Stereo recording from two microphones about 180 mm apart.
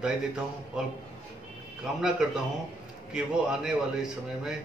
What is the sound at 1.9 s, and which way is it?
A man's voice, 5° right (ahead or behind).